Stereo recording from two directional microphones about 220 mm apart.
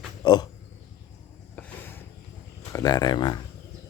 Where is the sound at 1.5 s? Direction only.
5° left (ahead or behind).